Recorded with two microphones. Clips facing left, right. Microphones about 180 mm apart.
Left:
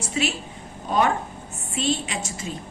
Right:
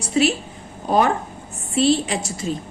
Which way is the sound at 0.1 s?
40° right (ahead or behind).